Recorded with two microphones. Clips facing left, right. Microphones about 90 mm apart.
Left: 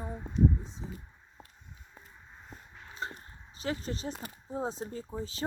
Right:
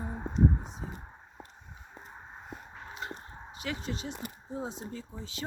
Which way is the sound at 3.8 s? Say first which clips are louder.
Even; 35° left (ahead or behind).